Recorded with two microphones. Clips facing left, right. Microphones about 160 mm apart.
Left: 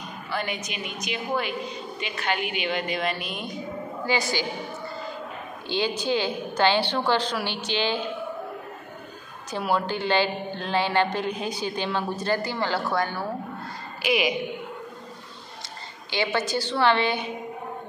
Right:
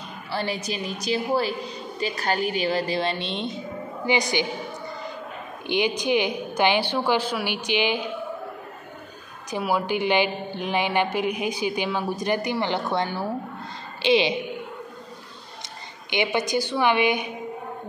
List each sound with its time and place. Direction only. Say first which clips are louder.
0.3 s a woman's voice: right 3 dB; 30° right (ahead or behind); by 8.1 s 15° right (ahead or behind)
9.5 s a woman's voice: right 1 dB; 10° right (ahead or behind); by 14.3 s 30° right (ahead or behind)
16.1 s a woman's voice: right 2 dB; 15° right (ahead or behind)